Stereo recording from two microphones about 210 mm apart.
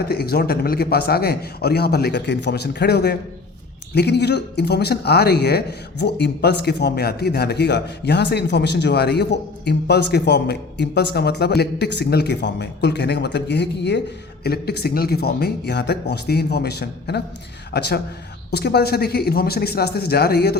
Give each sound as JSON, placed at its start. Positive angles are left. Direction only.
{"t": 0.0, "sound": "speech", "side_deg": 50}